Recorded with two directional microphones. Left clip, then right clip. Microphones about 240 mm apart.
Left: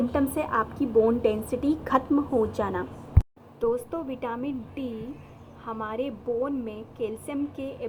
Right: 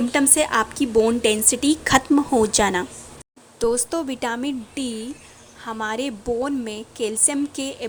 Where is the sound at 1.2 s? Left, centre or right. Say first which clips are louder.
Right 6 dB; right.